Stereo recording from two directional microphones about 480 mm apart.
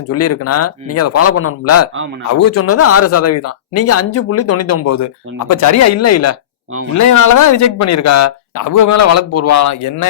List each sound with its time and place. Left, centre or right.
0.1 s speech: left